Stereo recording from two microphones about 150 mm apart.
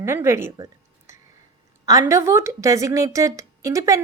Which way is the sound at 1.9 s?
20° right (ahead or behind).